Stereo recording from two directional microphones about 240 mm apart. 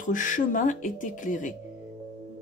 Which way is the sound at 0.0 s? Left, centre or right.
Left.